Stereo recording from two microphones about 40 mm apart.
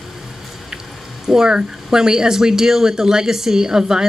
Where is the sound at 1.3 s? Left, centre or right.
Centre.